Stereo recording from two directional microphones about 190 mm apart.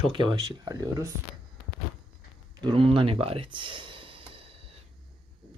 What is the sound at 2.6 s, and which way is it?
Speech, 30° right (ahead or behind).